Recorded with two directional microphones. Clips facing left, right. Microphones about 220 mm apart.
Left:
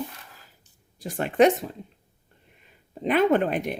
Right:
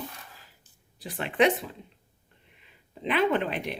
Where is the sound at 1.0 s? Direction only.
45° left (ahead or behind).